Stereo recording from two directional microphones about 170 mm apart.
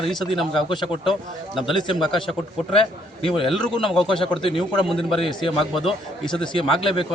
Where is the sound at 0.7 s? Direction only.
25° left (ahead or behind).